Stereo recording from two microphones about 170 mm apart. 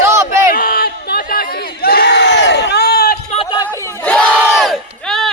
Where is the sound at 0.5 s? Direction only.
60° left (ahead or behind).